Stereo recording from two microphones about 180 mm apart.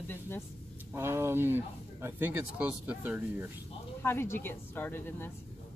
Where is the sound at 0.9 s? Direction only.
15° right (ahead or behind).